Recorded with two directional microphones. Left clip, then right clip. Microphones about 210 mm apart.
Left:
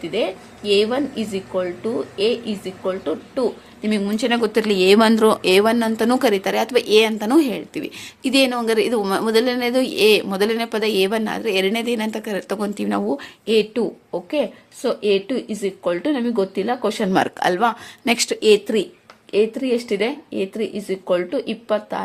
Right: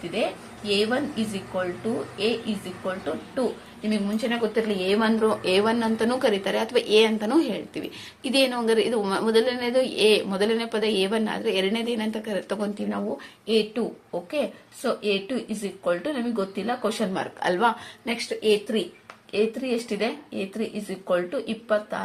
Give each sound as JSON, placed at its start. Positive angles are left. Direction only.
{"t": 0.1, "sound": "a woman's voice", "side_deg": 45}
{"t": 3.8, "sound": "speech", "side_deg": 55}
{"t": 12.9, "sound": "a woman's voice", "side_deg": 50}
{"t": 18.1, "sound": "a woman's voice", "side_deg": 55}